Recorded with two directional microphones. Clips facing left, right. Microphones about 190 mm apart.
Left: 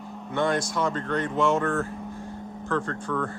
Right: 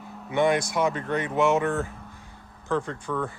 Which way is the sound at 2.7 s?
15° right (ahead or behind).